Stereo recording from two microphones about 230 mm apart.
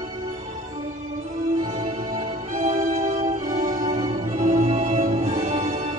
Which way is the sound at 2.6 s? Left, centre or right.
Right.